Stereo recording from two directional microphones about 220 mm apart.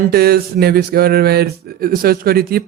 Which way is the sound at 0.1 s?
45° right (ahead or behind).